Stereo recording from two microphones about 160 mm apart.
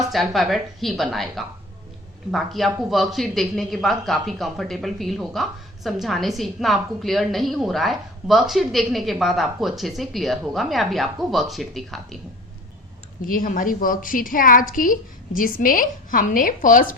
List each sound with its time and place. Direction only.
0.1 s speech: centre (ahead or behind)
13.2 s a woman's voice: 60° left (ahead or behind)